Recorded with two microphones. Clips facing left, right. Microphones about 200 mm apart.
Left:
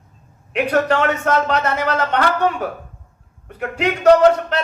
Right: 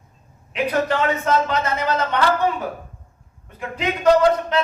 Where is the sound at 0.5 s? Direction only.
70° left (ahead or behind).